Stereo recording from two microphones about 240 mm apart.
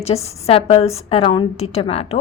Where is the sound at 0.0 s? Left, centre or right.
Left.